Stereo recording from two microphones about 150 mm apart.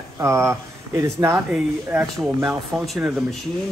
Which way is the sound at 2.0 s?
5° right (ahead or behind).